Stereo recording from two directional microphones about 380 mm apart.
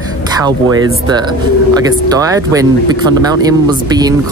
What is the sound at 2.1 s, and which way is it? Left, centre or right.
Speech, centre.